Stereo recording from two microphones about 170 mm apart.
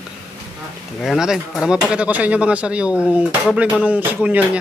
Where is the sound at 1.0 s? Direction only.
Centre (ahead or behind).